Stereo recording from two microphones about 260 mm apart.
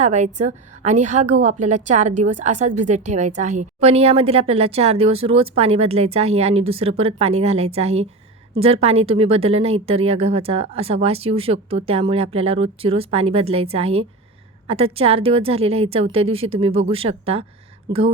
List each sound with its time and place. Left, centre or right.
0.0 s a woman's voice: right